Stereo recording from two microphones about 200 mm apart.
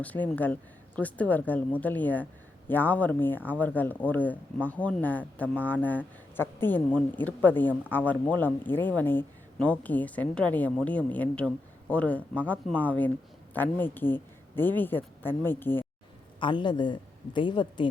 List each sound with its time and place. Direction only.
0.0 s a woman's voice: 10° left (ahead or behind)
16.4 s a man's voice: 25° left (ahead or behind)